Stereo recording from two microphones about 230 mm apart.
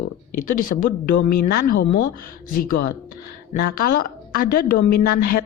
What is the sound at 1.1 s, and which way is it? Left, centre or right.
A woman's voice, left.